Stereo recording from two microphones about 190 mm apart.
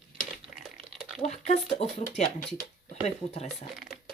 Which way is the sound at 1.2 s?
35° left (ahead or behind).